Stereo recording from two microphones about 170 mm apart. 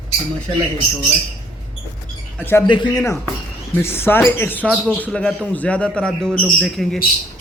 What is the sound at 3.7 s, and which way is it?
A man's voice, 15° left (ahead or behind).